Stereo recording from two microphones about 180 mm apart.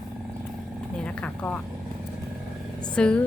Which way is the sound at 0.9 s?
5° left (ahead or behind).